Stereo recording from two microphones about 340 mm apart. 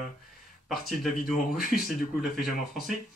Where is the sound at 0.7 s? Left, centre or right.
Centre.